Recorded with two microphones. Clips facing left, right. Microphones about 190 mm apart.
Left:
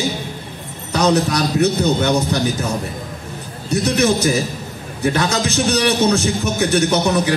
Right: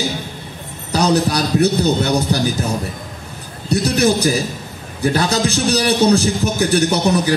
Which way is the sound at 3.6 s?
35° right (ahead or behind).